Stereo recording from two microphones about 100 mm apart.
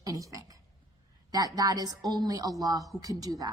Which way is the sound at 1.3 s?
40° right (ahead or behind).